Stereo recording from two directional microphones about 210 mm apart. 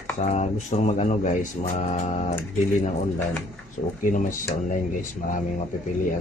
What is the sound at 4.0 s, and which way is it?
Music, 40° left (ahead or behind).